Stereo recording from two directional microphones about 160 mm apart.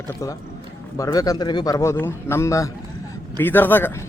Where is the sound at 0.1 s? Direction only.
20° left (ahead or behind).